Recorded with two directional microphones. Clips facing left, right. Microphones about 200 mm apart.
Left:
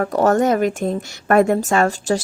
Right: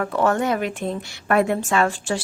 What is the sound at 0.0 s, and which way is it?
A woman's voice, 40° left (ahead or behind).